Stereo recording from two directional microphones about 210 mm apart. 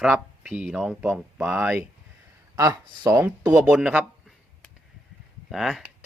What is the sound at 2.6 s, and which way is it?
Speech, 20° right (ahead or behind).